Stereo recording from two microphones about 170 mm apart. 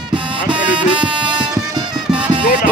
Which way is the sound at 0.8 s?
30° right (ahead or behind).